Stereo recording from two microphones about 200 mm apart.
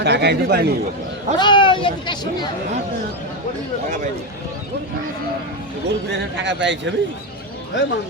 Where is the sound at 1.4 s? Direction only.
25° left (ahead or behind).